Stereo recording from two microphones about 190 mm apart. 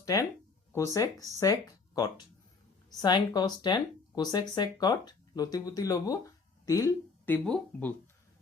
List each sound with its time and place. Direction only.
0.0 s speech: 15° left (ahead or behind)